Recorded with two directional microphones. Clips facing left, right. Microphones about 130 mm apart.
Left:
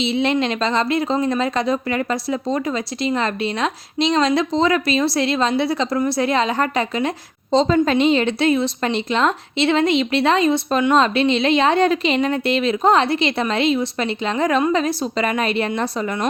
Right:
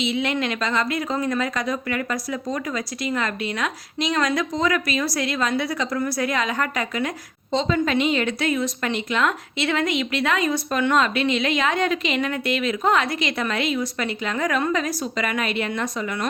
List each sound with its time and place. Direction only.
0.0 s a woman's voice: 30° left (ahead or behind)